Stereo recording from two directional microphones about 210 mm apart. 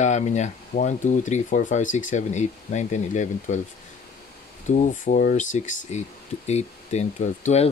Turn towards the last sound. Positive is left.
turn(degrees=35)  # may be behind; listen again after turning